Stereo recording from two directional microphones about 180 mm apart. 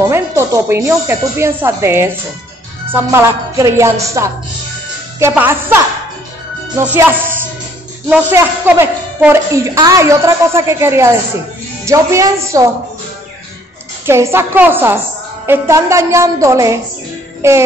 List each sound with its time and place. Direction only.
0.1 s a woman's voice: 15° right (ahead or behind)
8.1 s a woman's voice: 10° right (ahead or behind)
14.0 s a woman's voice: 15° right (ahead or behind)
17.4 s music: 15° right (ahead or behind)